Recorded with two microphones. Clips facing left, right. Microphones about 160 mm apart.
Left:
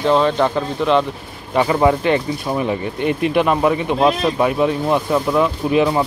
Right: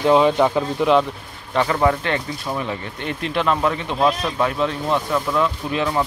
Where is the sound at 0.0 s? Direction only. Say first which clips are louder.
Even; 10° right (ahead or behind).